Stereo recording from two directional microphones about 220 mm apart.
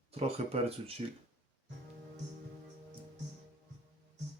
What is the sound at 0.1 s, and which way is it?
Speech, 30° right (ahead or behind).